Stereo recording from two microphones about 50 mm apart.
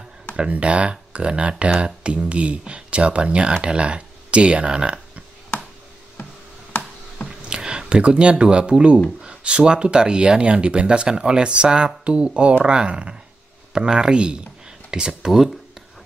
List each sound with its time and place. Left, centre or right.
0.5 s speech: right
7.2 s speech: centre